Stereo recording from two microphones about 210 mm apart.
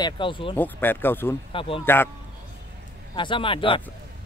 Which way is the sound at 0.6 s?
10° left (ahead or behind).